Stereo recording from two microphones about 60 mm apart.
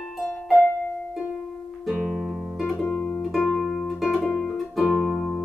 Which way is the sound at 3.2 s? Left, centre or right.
Centre.